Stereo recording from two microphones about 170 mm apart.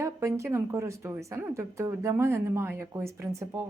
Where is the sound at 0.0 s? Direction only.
15° right (ahead or behind).